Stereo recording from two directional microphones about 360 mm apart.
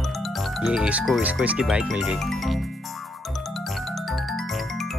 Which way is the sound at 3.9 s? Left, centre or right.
Centre.